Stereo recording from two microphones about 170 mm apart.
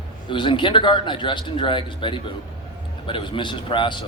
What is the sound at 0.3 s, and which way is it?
A man's voice, 30° left (ahead or behind).